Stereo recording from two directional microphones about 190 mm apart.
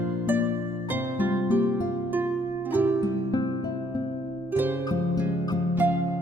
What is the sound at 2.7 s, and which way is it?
Music, 10° right (ahead or behind).